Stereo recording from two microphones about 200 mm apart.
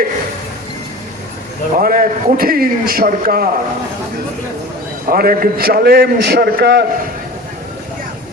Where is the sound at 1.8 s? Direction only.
45° right (ahead or behind).